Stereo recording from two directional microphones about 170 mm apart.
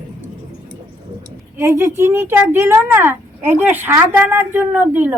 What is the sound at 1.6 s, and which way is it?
Speech, 15° right (ahead or behind).